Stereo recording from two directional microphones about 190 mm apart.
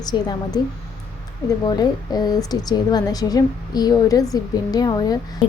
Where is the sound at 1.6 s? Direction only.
20° left (ahead or behind).